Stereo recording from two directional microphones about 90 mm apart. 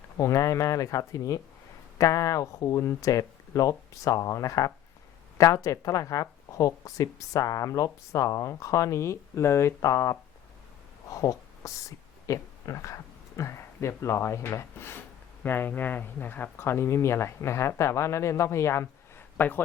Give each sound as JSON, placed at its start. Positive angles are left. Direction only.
{"t": 0.2, "sound": "a woman's voice", "side_deg": 35}
{"t": 19.4, "sound": "speech", "side_deg": 20}